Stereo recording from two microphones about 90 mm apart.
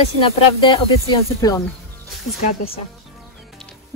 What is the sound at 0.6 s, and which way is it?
Speech, 60° left (ahead or behind).